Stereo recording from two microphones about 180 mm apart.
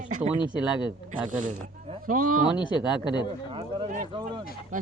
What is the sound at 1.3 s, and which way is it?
Speech, 45° right (ahead or behind).